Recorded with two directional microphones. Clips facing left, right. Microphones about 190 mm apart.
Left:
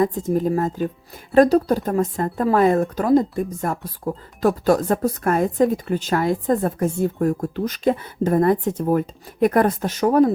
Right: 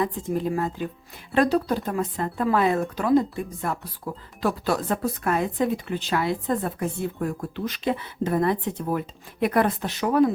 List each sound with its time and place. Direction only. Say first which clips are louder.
0.0 s a woman's voice: left 6 dB; 40° left (ahead or behind)